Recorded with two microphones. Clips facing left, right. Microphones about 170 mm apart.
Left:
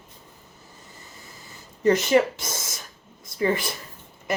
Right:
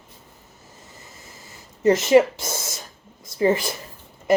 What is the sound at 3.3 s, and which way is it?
Speech, 25° right (ahead or behind).